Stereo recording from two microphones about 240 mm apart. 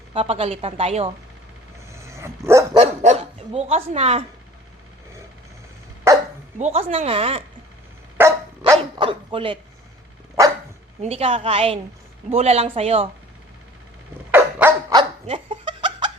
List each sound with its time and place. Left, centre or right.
0.1 s speech: right
1.9 s dog: centre
2.7 s dog: right
6.1 s dog: centre
6.6 s speech: right
8.2 s dog: centre
8.8 s speech: right
11.0 s speech: right
14.3 s dog: centre
15.3 s laughter: right